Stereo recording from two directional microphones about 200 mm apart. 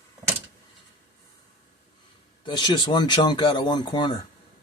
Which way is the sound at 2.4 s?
20° left (ahead or behind).